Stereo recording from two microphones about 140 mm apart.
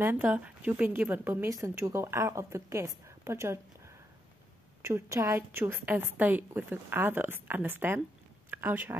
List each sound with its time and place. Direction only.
0.0 s a woman's voice: 15° right (ahead or behind)